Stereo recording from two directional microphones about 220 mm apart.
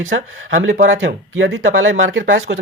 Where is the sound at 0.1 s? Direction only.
60° right (ahead or behind).